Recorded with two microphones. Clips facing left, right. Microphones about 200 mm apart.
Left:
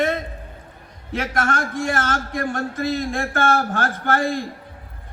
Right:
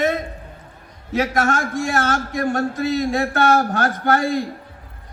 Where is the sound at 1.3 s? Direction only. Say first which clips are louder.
Right 3 dB; 45° right (ahead or behind).